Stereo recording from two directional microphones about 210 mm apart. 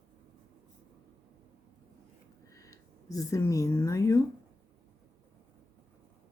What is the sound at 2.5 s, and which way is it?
Speech, 15° left (ahead or behind).